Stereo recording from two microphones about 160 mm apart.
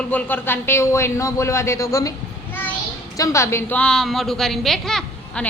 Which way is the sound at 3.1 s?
20° left (ahead or behind).